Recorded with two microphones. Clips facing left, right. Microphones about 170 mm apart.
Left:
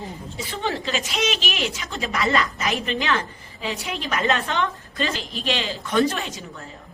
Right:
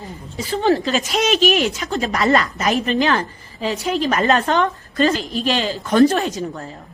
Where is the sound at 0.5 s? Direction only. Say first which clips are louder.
Right 9 dB; 40° right (ahead or behind).